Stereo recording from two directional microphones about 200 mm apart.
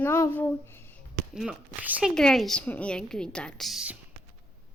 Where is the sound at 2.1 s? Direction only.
5° left (ahead or behind).